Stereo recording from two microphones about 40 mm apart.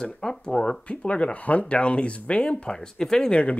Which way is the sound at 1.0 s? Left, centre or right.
Left.